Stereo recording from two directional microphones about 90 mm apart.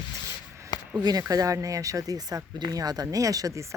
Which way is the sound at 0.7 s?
45° left (ahead or behind).